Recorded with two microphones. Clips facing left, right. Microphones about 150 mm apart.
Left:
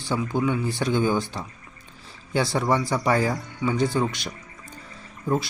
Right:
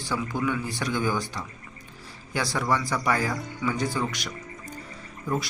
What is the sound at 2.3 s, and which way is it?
Speech, 25° left (ahead or behind).